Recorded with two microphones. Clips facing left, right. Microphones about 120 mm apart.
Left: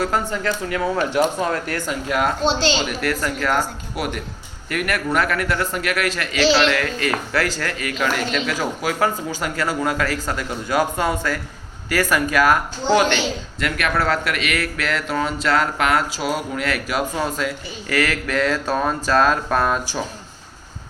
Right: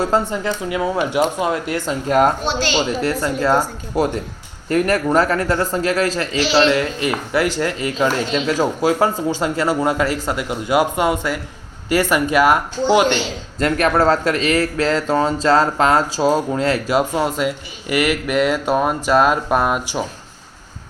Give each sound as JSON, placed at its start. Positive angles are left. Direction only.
{"t": 0.0, "sound": "speech", "side_deg": -25}
{"t": 1.9, "sound": "speech", "side_deg": -40}
{"t": 2.8, "sound": "speech", "side_deg": -25}
{"t": 13.6, "sound": "speech", "side_deg": -35}